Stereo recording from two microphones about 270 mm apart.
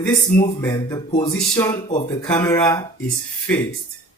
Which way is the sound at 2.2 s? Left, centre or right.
Centre.